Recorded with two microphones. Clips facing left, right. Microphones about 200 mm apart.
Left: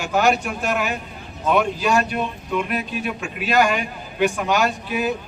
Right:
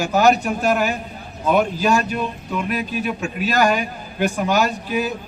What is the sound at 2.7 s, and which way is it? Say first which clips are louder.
A man's voice: right 2 dB; 40° right (ahead or behind).